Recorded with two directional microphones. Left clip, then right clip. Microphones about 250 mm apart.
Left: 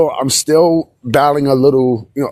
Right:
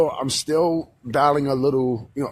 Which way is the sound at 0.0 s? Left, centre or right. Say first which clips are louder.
Left 7 dB; left.